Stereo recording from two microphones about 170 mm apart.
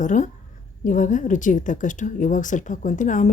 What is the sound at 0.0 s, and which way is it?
Speech, 45° left (ahead or behind).